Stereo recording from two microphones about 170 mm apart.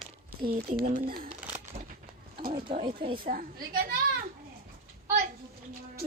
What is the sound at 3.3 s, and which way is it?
Speech, 55° right (ahead or behind).